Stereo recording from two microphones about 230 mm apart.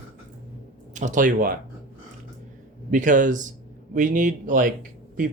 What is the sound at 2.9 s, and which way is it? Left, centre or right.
Speech, right.